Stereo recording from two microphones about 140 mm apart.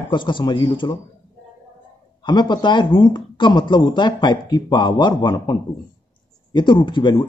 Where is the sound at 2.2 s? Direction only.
35° left (ahead or behind).